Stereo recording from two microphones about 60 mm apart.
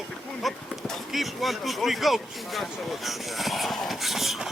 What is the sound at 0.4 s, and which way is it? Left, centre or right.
Speech, centre.